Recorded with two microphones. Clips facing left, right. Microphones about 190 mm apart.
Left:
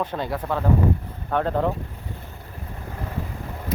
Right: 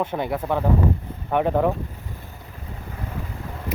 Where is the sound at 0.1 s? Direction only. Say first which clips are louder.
Right 2 dB; 15° right (ahead or behind).